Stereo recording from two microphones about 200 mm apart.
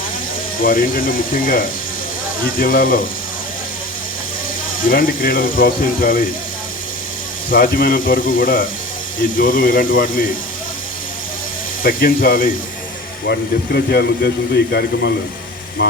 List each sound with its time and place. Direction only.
0.6 s speech: 45° left (ahead or behind)
4.9 s speech: 45° left (ahead or behind)
7.5 s speech: 45° left (ahead or behind)
11.8 s speech: 45° left (ahead or behind)